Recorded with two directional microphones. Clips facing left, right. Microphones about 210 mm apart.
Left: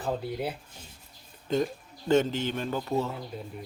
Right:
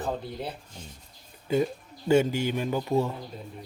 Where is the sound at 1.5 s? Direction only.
10° right (ahead or behind).